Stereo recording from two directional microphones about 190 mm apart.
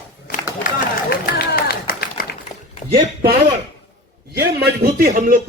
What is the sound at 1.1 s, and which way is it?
Run, 50° left (ahead or behind).